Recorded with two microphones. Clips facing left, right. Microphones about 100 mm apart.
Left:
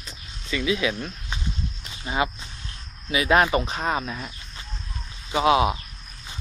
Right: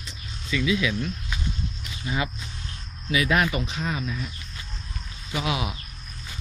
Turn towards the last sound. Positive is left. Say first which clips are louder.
# left 9 dB
turn(degrees=35)  # may be behind; listen again after turning